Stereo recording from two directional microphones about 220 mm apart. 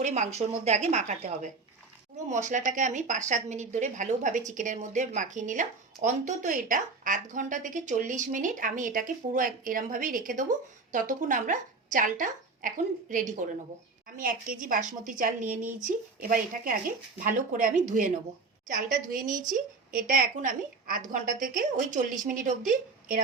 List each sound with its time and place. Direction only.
0.0 s a woman's voice: 30° right (ahead or behind)